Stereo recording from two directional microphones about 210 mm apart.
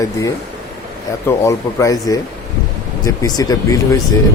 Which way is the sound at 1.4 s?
15° left (ahead or behind).